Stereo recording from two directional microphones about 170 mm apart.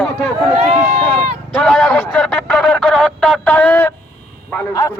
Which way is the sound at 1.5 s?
5° left (ahead or behind).